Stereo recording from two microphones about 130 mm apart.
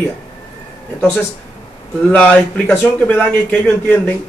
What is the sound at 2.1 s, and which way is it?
A man's voice, 15° left (ahead or behind).